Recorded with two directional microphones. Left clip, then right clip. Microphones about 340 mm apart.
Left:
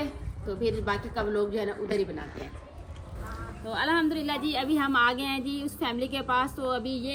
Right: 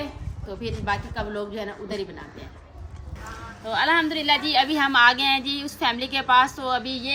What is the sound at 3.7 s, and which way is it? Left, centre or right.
A woman's voice, centre.